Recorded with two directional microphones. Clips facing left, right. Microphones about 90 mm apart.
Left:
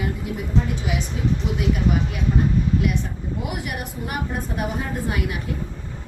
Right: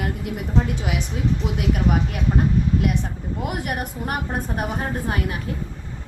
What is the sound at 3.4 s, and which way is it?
A woman's voice, 50° right (ahead or behind).